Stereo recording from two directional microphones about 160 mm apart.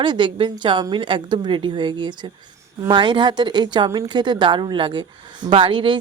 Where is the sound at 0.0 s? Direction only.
30° right (ahead or behind).